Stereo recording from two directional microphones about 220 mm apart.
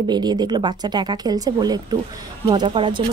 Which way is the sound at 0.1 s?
20° right (ahead or behind).